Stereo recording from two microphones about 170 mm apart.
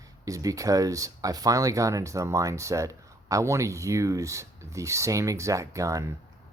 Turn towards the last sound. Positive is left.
turn(degrees=-20)  # may be behind; listen again after turning